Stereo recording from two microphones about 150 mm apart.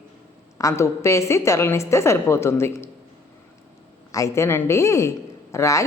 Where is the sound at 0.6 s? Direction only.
20° left (ahead or behind).